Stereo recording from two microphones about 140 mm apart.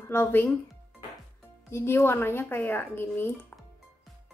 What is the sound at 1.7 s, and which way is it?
A woman's voice, 15° left (ahead or behind).